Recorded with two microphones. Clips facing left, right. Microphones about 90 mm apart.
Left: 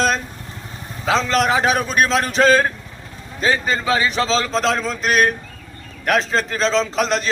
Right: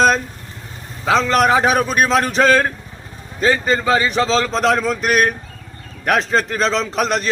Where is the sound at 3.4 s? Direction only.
50° right (ahead or behind).